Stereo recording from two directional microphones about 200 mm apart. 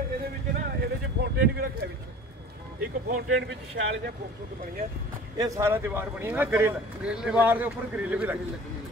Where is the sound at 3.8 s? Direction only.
65° right (ahead or behind).